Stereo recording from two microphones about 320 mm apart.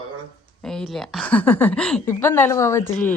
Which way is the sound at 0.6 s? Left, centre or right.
Centre.